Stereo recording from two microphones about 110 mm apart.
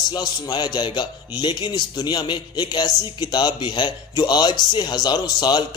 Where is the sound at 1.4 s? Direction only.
40° left (ahead or behind).